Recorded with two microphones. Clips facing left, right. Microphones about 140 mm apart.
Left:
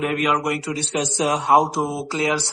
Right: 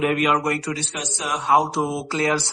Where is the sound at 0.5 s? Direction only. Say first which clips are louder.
Left 3 dB; 25° left (ahead or behind).